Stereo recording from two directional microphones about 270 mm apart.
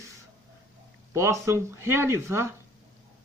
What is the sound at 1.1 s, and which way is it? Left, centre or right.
A man's voice, centre.